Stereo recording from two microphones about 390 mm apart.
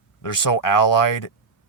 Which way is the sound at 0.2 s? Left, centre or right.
Left.